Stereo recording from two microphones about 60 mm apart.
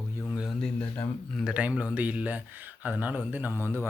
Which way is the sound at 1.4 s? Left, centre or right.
Right.